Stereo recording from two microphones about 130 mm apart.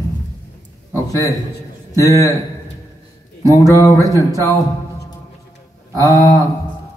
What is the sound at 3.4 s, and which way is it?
Speech, 25° right (ahead or behind).